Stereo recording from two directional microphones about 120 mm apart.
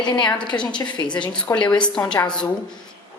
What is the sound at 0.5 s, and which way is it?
A woman's voice, 25° left (ahead or behind).